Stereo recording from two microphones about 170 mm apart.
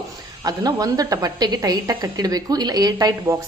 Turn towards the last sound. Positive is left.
turn(degrees=-20)  # may be behind; listen again after turning